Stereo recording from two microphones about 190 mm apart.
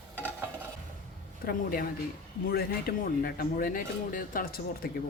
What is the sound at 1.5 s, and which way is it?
Speech, 50° left (ahead or behind).